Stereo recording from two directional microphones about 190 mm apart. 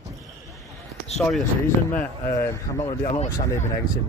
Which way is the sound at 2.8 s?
30° left (ahead or behind).